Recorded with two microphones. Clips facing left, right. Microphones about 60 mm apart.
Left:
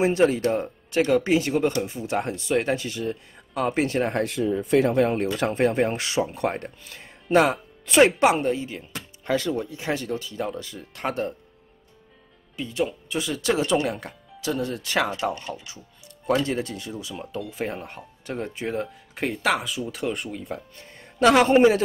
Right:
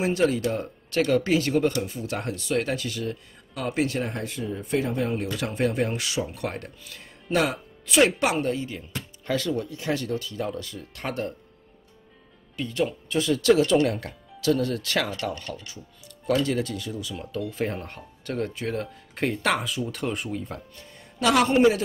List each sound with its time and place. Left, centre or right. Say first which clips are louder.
0.0 s speech: left 3 dB; left
4.1 s speech: left 7 dB; left
5.2 s speech: left 4 dB; left
12.5 s speech: even; centre
13.8 s speech: right 1 dB; centre
14.4 s speech: right 3 dB; left
17.1 s speech: right 1 dB; centre
20.7 s speech: left 1 dB; left